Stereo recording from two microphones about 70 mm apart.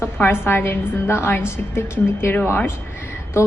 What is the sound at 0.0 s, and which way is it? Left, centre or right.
A woman's voice, left.